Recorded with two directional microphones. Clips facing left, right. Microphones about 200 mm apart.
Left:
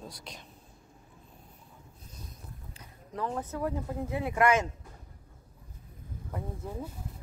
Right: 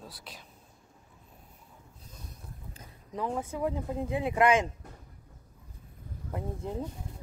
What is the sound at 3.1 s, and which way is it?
Speech, 15° right (ahead or behind).